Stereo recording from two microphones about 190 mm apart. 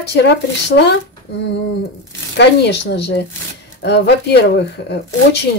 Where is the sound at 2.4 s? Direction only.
65° left (ahead or behind).